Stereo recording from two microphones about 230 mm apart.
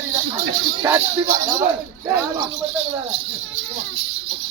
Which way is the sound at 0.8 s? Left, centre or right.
Centre.